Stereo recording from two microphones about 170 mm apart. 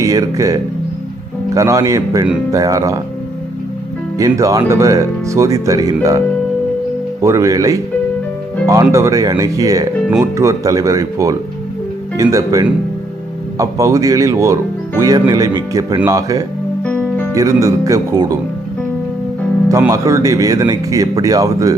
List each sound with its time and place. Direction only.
0.0 s speech: 20° right (ahead or behind)
4.2 s speech: 20° right (ahead or behind)
16.8 s music: 10° left (ahead or behind)
17.3 s speech: 20° right (ahead or behind)
19.9 s speech: 20° right (ahead or behind)